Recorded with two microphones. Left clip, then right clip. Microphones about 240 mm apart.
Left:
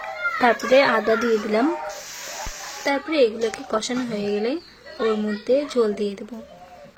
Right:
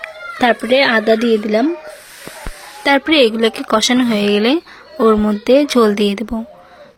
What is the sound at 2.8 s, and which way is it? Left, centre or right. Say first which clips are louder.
Speech: right 8 dB; right.